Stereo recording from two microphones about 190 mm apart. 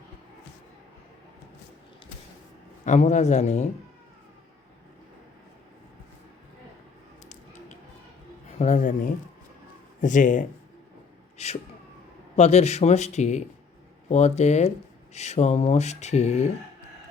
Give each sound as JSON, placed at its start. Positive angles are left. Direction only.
{"t": 2.8, "sound": "speech", "side_deg": 40}
{"t": 8.5, "sound": "speech", "side_deg": 40}
{"t": 10.0, "sound": "speech", "side_deg": 40}
{"t": 11.3, "sound": "a sound", "side_deg": 35}
{"t": 12.4, "sound": "speech", "side_deg": 35}